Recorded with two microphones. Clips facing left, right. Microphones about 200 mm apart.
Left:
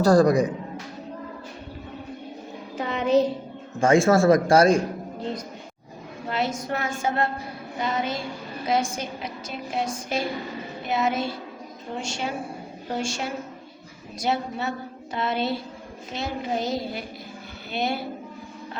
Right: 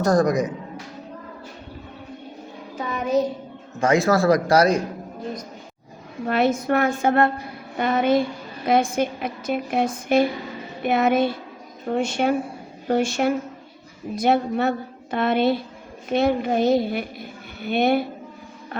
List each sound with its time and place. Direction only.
0.0 s a man's voice: 30° left (ahead or behind)
2.7 s music: 30° left (ahead or behind)
3.8 s speech: 30° left (ahead or behind)
5.2 s a sound: 30° left (ahead or behind)
6.2 s a woman's voice: 60° right (ahead or behind)